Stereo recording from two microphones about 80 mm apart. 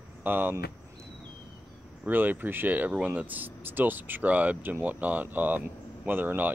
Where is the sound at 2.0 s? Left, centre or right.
Right.